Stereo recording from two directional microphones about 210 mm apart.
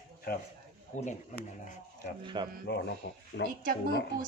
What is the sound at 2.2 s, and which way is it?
Speech, 20° right (ahead or behind).